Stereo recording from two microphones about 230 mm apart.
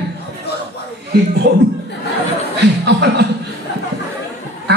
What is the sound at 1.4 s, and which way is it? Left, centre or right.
Speech, right.